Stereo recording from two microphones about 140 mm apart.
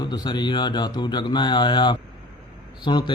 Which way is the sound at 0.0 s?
30° left (ahead or behind).